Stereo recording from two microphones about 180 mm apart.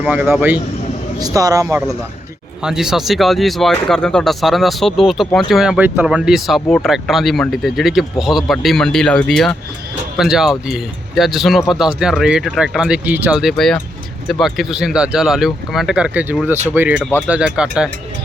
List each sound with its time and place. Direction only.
0.1 s speech: 10° right (ahead or behind)
1.2 s speech: 20° right (ahead or behind)
2.6 s speech: 5° right (ahead or behind)